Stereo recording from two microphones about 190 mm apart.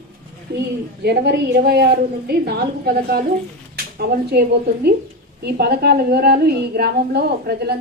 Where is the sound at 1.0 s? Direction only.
60° right (ahead or behind).